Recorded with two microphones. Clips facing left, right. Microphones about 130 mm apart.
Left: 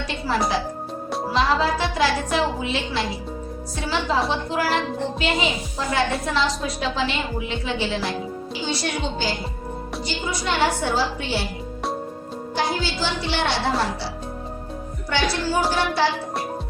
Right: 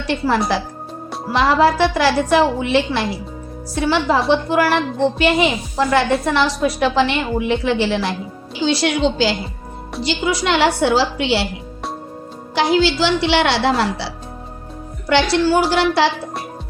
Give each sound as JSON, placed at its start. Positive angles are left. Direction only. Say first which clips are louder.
{"t": 0.1, "sound": "a woman's voice", "louder": "right 6 dB", "side_deg": -70}
{"t": 8.6, "sound": "a woman's voice", "louder": "right 10 dB", "side_deg": -90}
{"t": 12.5, "sound": "a woman's voice", "louder": "right 9 dB", "side_deg": -80}
{"t": 15.1, "sound": "a woman's voice", "louder": "right 8 dB", "side_deg": -80}